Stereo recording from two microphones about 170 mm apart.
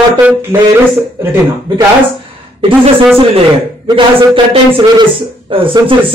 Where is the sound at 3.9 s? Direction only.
30° right (ahead or behind).